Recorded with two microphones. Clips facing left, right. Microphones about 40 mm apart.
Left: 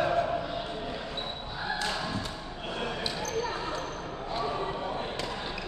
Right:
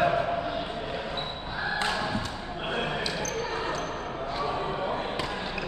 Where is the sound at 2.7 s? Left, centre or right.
Right.